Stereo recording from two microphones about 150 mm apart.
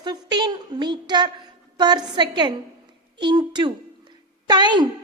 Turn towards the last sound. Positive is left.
turn(degrees=-30)  # may be behind; listen again after turning